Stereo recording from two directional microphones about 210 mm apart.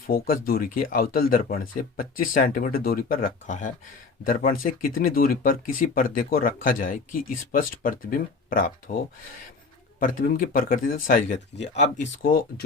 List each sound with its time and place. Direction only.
0.1 s speech: 45° left (ahead or behind)
10.0 s speech: 40° left (ahead or behind)
12.2 s speech: 45° left (ahead or behind)